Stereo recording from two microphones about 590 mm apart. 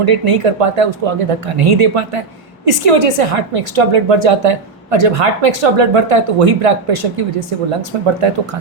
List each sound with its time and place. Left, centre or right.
0.0 s a woman's voice: right